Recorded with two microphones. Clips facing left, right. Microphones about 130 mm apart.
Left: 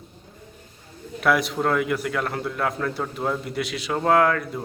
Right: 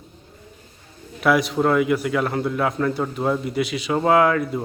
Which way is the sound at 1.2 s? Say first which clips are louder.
Right 3 dB; centre (ahead or behind).